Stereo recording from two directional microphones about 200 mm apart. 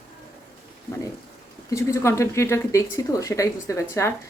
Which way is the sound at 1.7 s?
15° left (ahead or behind).